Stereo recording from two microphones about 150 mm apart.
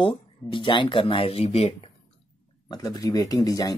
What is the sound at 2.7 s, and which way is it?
Speech, 25° left (ahead or behind).